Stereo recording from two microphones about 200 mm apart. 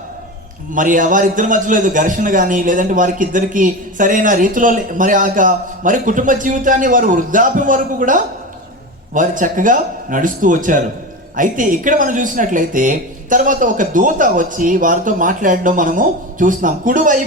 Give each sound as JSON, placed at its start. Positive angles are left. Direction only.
{"t": 0.7, "sound": "a man's voice", "side_deg": -40}